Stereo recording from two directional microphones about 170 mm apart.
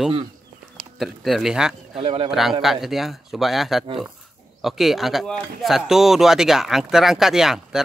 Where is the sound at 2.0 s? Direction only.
30° right (ahead or behind).